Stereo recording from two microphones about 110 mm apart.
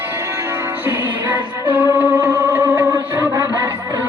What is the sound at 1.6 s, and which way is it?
Music, 15° right (ahead or behind).